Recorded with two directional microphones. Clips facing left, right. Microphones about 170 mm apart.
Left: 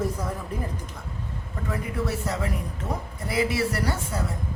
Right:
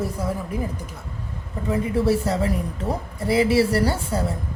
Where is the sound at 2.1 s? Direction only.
30° right (ahead or behind).